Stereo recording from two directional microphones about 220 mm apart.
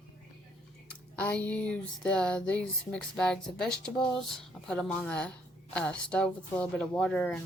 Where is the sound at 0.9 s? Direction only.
5° left (ahead or behind).